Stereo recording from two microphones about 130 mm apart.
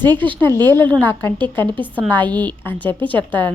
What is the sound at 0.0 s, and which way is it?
A woman's voice, 15° left (ahead or behind).